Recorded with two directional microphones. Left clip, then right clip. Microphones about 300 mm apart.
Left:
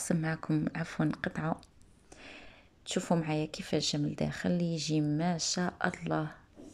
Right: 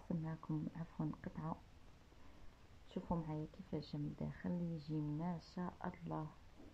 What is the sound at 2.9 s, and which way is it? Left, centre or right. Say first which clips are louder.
Speech: left 14 dB; centre.